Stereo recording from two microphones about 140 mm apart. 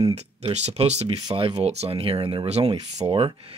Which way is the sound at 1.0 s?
35° right (ahead or behind).